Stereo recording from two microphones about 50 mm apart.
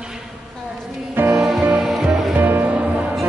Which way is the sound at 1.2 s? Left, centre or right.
Right.